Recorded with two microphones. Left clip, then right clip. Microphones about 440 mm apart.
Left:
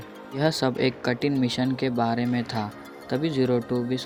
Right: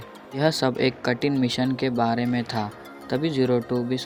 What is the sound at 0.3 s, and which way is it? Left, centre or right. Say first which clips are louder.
Speech: right 2 dB; left.